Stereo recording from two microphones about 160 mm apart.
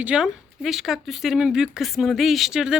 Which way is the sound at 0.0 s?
5° right (ahead or behind).